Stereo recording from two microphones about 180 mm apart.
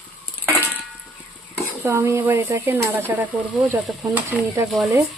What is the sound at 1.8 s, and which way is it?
Speech, 15° right (ahead or behind).